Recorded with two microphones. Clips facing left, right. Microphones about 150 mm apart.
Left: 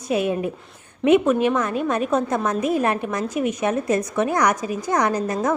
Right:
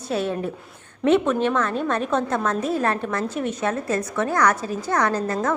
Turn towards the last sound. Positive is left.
turn(degrees=15)  # may be behind; listen again after turning